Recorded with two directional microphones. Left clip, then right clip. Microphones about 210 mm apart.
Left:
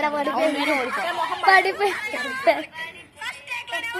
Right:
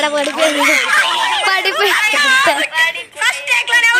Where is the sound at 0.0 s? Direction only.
45° right (ahead or behind).